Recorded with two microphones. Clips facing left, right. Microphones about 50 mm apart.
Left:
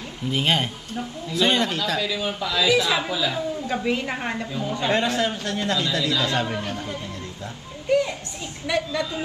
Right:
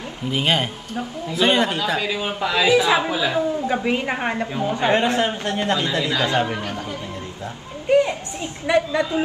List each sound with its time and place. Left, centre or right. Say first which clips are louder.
0.3 s a woman's voice: right 2 dB; centre; by 3.4 s right
3.6 s a woman's voice: right 3 dB; right
7.9 s children playing: right 4 dB; right
8.6 s a woman's voice: right 6 dB; right